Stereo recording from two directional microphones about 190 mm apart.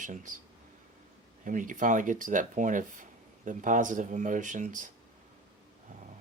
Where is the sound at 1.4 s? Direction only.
45° right (ahead or behind).